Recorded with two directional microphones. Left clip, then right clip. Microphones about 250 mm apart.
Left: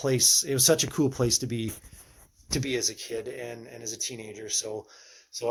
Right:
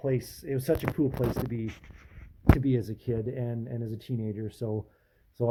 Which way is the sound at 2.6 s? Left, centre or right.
Centre.